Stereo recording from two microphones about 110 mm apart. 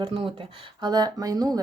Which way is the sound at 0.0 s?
50° right (ahead or behind).